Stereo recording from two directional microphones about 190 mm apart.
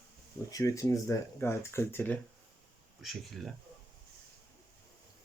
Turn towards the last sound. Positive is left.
turn(degrees=0)  # may be behind; listen again after turning